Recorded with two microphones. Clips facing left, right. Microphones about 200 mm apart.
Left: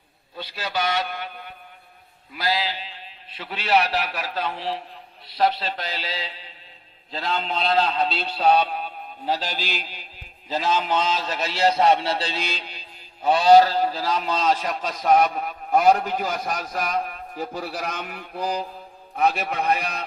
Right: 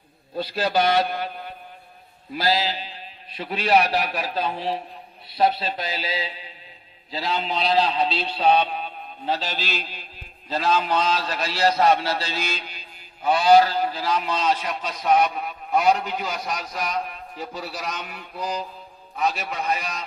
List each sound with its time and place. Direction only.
0.3 s a man's voice: 40° right (ahead or behind)
4.3 s a man's voice: 20° right (ahead or behind)
5.4 s a man's voice: 10° right (ahead or behind); by 20.1 s 60° left (ahead or behind)